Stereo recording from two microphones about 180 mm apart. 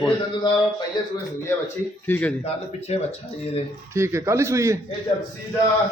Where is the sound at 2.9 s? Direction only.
40° left (ahead or behind).